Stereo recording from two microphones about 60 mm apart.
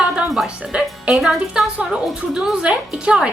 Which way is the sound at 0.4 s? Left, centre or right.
Centre.